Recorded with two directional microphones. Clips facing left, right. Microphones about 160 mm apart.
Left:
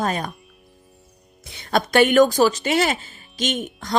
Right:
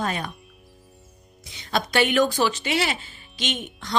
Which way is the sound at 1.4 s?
55° left (ahead or behind).